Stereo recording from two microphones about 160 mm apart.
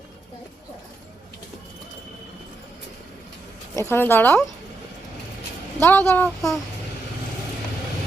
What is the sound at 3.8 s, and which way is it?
Speech, 15° left (ahead or behind).